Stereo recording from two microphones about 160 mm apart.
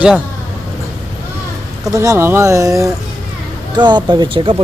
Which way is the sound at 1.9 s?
20° right (ahead or behind).